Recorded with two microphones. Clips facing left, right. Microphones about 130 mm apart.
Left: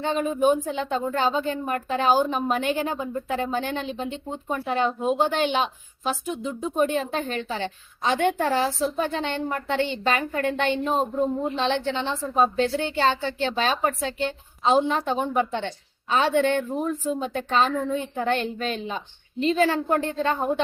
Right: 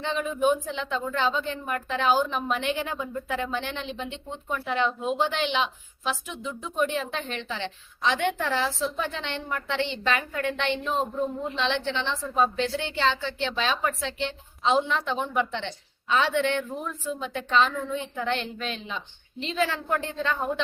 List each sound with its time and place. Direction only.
0.0 s speech: 45° left (ahead or behind)